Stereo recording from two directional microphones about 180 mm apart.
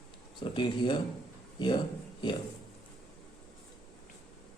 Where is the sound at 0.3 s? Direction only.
25° left (ahead or behind).